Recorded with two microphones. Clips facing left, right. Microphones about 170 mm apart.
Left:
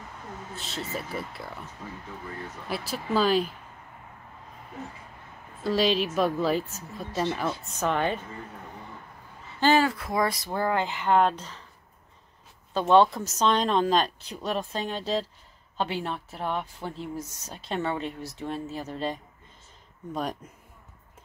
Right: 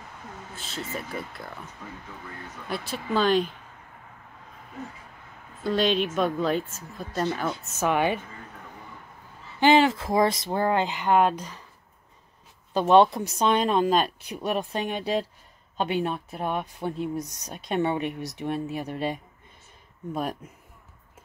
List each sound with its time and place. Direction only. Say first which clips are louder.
0.6 s a woman's voice: even; centre (ahead or behind)
2.7 s a woman's voice: even; centre (ahead or behind)
5.6 s a woman's voice: even; centre (ahead or behind)
9.6 s speech: right 3 dB; 20° right (ahead or behind)
12.7 s speech: right 2 dB; 20° right (ahead or behind)